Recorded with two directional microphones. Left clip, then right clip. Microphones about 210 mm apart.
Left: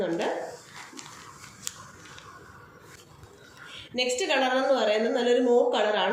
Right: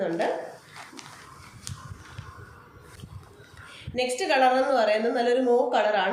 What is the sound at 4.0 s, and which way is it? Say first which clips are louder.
A woman's voice: right 3 dB; 35° right (ahead or behind).